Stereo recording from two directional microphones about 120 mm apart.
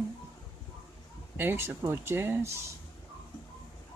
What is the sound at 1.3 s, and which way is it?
Speech, 20° right (ahead or behind).